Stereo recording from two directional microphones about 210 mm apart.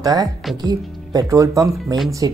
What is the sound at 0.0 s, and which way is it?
Speech, 15° right (ahead or behind).